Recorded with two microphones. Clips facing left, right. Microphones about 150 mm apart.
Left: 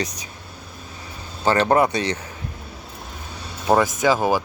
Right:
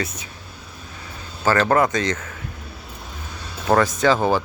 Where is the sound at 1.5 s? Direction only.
20° left (ahead or behind).